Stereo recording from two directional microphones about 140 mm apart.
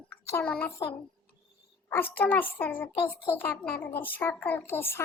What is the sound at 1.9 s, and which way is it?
A child's voice, 15° left (ahead or behind).